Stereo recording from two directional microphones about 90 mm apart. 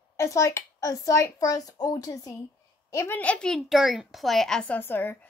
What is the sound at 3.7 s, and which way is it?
A woman's voice, 5° right (ahead or behind).